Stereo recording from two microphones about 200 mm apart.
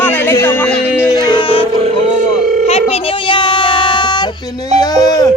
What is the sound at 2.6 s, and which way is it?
Child singing, 30° left (ahead or behind).